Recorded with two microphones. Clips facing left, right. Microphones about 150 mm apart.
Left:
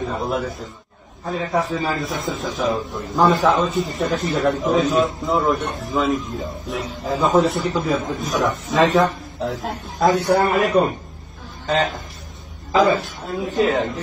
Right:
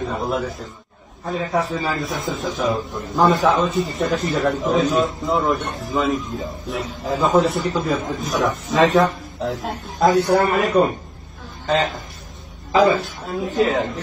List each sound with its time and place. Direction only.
0.0 s a man's voice: centre (ahead or behind)
12.7 s a man's voice: centre (ahead or behind)